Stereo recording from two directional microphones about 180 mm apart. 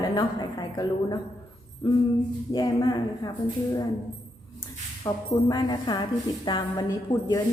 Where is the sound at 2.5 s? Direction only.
25° left (ahead or behind).